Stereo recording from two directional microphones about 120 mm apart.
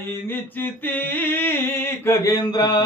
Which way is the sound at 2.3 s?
35° left (ahead or behind).